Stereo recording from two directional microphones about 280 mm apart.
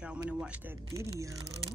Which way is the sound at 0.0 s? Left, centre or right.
Centre.